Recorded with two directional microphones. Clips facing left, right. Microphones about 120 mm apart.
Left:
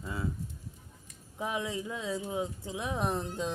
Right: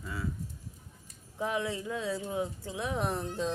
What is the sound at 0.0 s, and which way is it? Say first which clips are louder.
Speech: left 1 dB; 25° left (ahead or behind).